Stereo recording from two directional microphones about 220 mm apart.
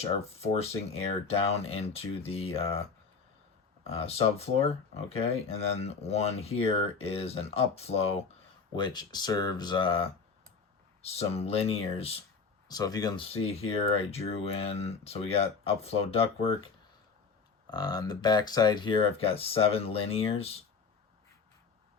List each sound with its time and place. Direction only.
0.0 s speech: 30° left (ahead or behind)
3.8 s speech: 25° left (ahead or behind)
17.7 s speech: 20° left (ahead or behind)